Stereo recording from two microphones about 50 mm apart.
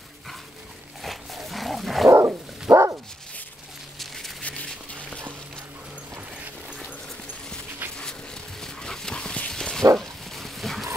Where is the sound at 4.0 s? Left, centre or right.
Centre.